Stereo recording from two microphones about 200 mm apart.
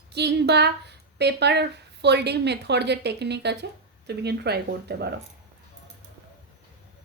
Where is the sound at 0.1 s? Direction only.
55° right (ahead or behind).